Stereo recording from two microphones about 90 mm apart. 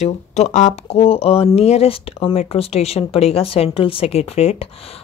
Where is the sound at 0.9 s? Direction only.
90° left.